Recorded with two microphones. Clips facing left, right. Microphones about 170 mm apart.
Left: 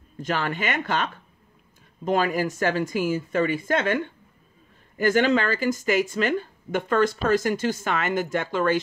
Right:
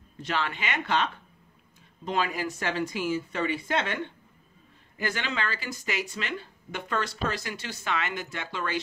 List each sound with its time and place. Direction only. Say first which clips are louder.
0.2 s speech: left 4 dB; 45° left (ahead or behind)